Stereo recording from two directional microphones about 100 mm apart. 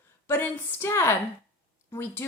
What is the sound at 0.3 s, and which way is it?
A woman's voice, 25° left (ahead or behind).